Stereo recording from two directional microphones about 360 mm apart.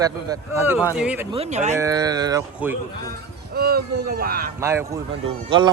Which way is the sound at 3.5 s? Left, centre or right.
Right.